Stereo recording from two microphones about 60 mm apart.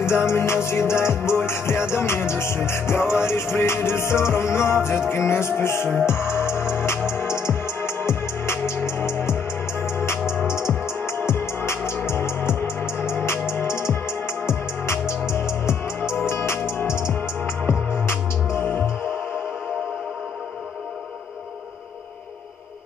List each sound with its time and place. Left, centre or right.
0.0 s music: left